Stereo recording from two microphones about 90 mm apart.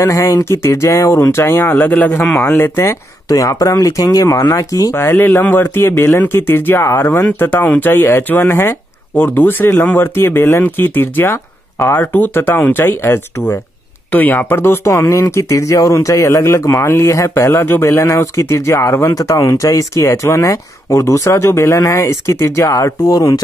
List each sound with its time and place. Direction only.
0.0 s speech: 35° left (ahead or behind)
3.3 s speech: 40° left (ahead or behind)
4.9 s speech: 25° left (ahead or behind); by 23.4 s 45° left (ahead or behind)